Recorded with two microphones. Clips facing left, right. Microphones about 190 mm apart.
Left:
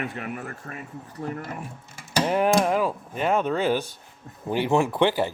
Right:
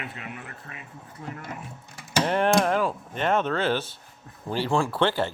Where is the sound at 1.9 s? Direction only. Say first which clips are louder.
Left 1 dB; 5° left (ahead or behind).